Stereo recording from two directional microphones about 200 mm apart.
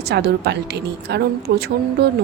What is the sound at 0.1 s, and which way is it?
Speech, 55° right (ahead or behind).